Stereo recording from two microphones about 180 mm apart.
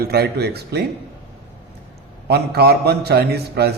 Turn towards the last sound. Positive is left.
turn(degrees=-65)  # may be behind; listen again after turning